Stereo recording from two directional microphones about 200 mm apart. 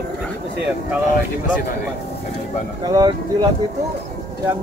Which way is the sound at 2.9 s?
20° right (ahead or behind).